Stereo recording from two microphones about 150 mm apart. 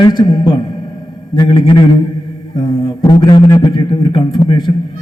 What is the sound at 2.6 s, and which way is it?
A man's voice, 30° left (ahead or behind).